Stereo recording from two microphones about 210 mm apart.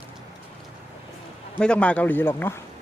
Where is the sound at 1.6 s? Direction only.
5° left (ahead or behind).